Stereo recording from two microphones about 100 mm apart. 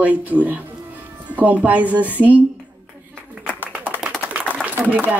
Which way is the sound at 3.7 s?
15° right (ahead or behind).